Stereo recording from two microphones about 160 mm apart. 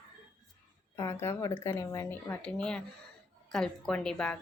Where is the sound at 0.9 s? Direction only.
15° left (ahead or behind).